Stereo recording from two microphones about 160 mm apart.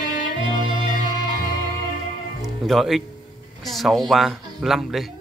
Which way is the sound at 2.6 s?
Centre (ahead or behind).